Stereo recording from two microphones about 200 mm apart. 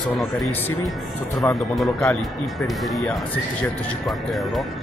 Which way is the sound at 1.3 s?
15° left (ahead or behind).